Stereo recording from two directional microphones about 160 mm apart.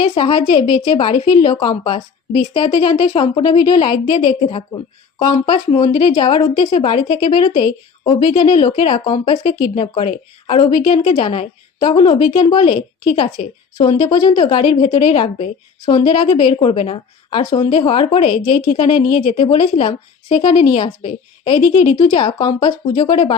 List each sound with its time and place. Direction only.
0.0 s speech: 35° left (ahead or behind)